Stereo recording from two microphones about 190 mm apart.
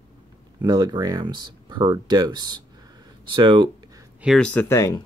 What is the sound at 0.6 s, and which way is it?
Speech, 20° right (ahead or behind).